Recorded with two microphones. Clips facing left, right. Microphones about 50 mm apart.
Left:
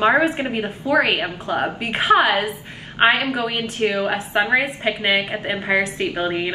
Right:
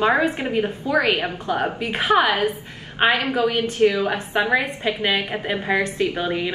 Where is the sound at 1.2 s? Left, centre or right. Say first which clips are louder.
Left 1 dB; left.